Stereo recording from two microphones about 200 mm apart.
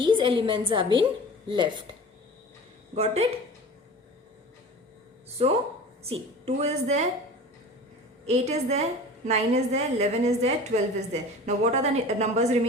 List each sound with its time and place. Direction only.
0.0 s a woman's voice: 25° right (ahead or behind)
2.9 s a woman's voice: 30° right (ahead or behind)
6.0 s a woman's voice: 30° right (ahead or behind)
8.3 s a woman's voice: 35° right (ahead or behind)